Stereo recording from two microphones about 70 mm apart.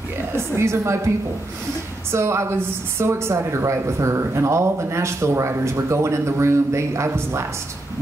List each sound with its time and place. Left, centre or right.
0.6 s a woman's voice: right